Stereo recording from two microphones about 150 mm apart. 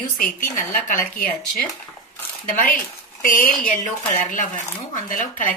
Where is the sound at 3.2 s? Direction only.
65° left (ahead or behind).